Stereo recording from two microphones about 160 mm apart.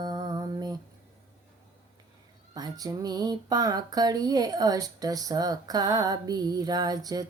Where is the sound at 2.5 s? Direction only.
25° right (ahead or behind).